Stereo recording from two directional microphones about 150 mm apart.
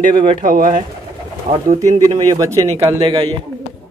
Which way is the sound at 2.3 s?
20° right (ahead or behind).